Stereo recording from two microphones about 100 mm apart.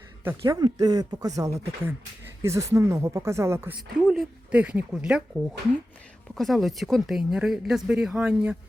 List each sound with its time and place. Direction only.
0.4 s speech: 40° right (ahead or behind)
1.5 s speech: 20° right (ahead or behind)
4.5 s speech: 10° right (ahead or behind)